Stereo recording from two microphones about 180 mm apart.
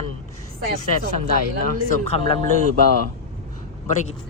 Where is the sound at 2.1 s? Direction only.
30° left (ahead or behind).